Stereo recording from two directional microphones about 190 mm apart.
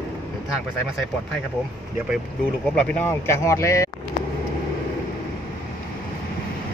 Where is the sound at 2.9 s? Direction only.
10° left (ahead or behind).